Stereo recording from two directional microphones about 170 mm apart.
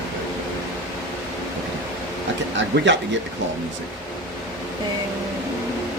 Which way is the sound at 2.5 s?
90° right.